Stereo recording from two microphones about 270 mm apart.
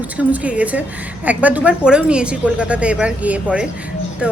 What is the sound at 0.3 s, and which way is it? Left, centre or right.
A woman's voice, centre.